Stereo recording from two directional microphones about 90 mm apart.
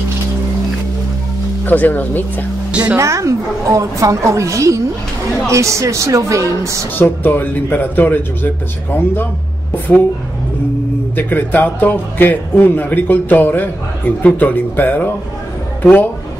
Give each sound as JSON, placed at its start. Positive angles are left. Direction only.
{"t": 1.7, "sound": "a man's voice", "side_deg": 20}
{"t": 2.7, "sound": "speech", "side_deg": -15}
{"t": 3.0, "sound": "a woman's voice", "side_deg": -35}
{"t": 7.0, "sound": "a man's voice", "side_deg": 20}
{"t": 11.1, "sound": "a man's voice", "side_deg": 20}